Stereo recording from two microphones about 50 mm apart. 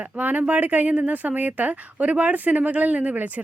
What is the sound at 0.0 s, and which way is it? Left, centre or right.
A woman's voice, right.